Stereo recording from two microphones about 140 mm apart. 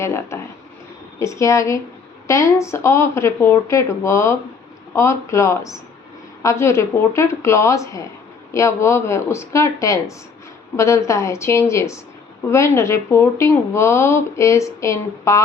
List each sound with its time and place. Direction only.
0.0 s speech: 20° left (ahead or behind)